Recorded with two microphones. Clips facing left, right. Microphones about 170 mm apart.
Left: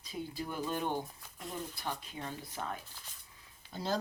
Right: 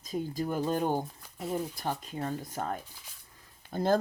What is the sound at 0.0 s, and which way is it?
Speech, 45° right (ahead or behind).